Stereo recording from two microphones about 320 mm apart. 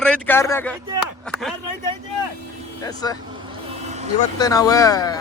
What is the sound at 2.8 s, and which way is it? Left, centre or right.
Speech, centre.